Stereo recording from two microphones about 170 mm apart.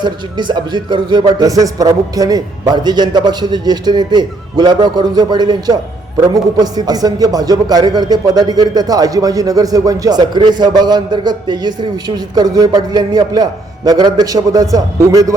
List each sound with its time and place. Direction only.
0.0 s a man's voice: 25° right (ahead or behind)